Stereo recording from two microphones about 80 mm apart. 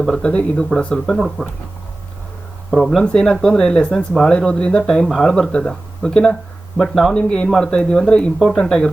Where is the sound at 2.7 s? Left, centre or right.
Centre.